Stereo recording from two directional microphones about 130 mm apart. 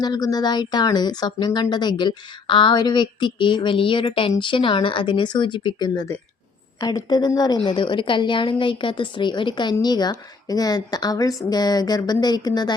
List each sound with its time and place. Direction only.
0.0 s speech: 30° left (ahead or behind)